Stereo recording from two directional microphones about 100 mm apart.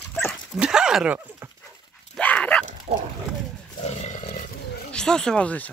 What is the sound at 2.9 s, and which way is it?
Speech, 90° right.